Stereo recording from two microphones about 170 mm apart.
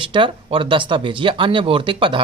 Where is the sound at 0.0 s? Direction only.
30° right (ahead or behind).